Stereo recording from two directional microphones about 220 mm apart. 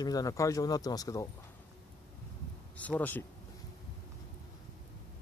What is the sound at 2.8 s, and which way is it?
Speech, 5° left (ahead or behind).